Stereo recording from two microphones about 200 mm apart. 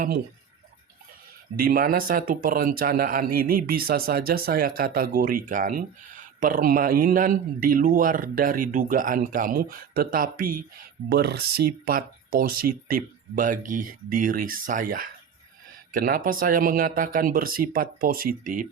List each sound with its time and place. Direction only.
1.5 s speech: 45° right (ahead or behind)